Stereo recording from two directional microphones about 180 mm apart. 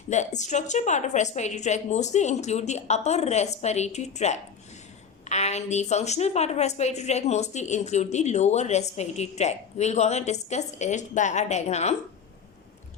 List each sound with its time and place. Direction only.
0.1 s a woman's voice: 40° left (ahead or behind)